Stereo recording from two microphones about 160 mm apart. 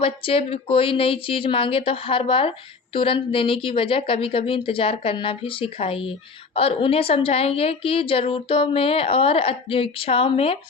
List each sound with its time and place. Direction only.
0.0 s a woman's voice: 35° left (ahead or behind)